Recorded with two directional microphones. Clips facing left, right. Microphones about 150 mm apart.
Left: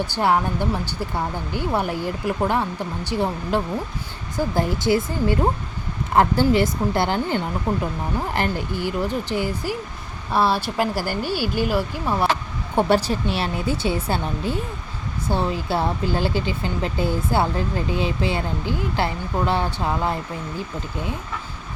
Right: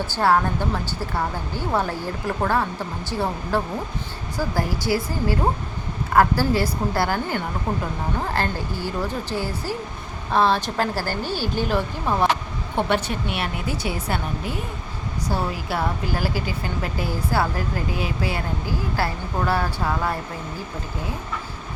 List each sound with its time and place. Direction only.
0.1 s speech: 15° left (ahead or behind)
12.7 s speech: 35° left (ahead or behind)